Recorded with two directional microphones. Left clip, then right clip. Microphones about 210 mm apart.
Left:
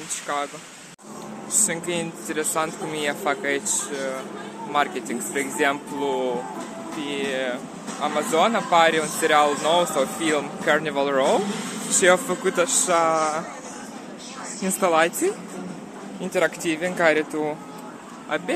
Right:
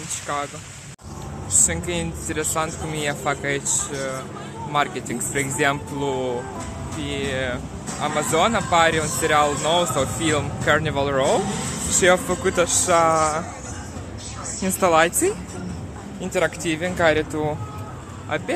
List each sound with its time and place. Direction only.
0.3 s speech: 5° right (ahead or behind)
1.7 s speech: centre (ahead or behind)
11.4 s a sound: 45° right (ahead or behind)
12.0 s speech: 10° right (ahead or behind)
14.6 s speech: 15° right (ahead or behind)
16.3 s speech: 5° right (ahead or behind)